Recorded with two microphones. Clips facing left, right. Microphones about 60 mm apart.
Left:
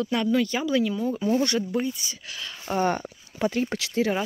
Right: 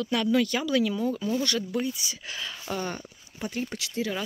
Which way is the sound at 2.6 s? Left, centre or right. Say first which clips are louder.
Left 8 dB; left.